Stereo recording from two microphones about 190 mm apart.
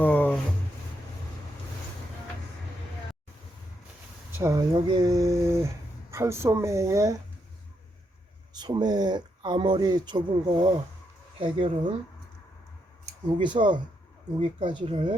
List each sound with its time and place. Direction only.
0.0 s a sound: 10° left (ahead or behind)
4.4 s a woman's voice: 15° right (ahead or behind)
8.5 s speech: 20° right (ahead or behind)
13.2 s speech: 25° right (ahead or behind)